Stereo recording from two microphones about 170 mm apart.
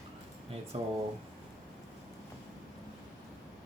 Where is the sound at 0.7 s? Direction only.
35° right (ahead or behind).